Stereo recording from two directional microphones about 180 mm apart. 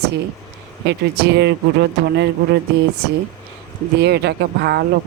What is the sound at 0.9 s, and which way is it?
Speech, 70° right (ahead or behind).